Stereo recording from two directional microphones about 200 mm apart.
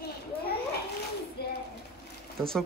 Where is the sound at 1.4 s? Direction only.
50° left (ahead or behind).